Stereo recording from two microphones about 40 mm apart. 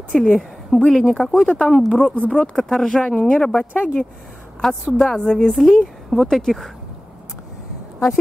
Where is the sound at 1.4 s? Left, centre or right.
Left.